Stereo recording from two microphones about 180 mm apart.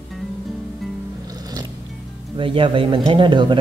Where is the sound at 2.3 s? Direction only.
30° right (ahead or behind).